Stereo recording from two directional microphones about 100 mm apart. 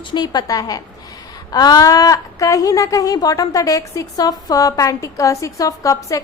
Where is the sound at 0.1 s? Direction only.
45° left (ahead or behind).